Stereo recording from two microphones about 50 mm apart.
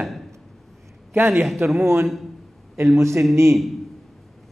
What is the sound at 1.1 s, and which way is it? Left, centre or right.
Speech, right.